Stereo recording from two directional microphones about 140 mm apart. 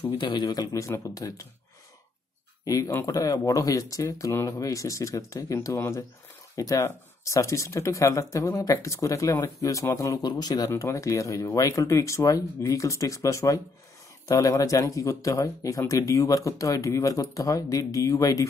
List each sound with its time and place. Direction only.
0.2 s speech: 35° left (ahead or behind)
2.6 s speech: 25° left (ahead or behind)